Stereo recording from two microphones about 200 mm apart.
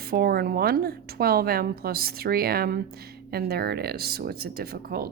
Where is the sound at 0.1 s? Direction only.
50° right (ahead or behind).